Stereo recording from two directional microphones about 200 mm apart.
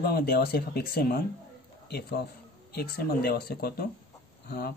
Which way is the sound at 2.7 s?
50° left (ahead or behind).